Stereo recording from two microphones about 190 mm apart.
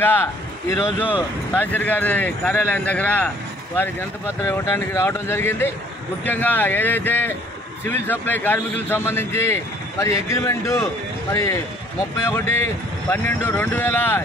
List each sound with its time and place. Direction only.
0.0 s a man's voice: 10° left (ahead or behind)
4.4 s a man's voice: 15° left (ahead or behind)